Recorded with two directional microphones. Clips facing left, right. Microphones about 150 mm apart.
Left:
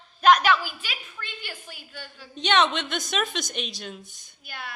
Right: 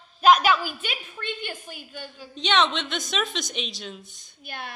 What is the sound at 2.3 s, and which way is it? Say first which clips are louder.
A woman's voice: left 1 dB; centre (ahead or behind).